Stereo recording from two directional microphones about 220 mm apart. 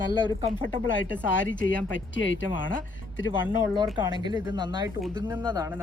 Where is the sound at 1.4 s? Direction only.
60° left (ahead or behind).